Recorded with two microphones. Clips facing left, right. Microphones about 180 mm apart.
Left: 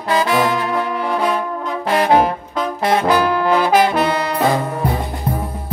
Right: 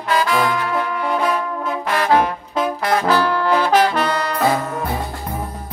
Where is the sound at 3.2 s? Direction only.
15° left (ahead or behind).